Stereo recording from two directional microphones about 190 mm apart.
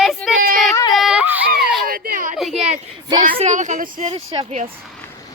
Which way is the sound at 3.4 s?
40° right (ahead or behind).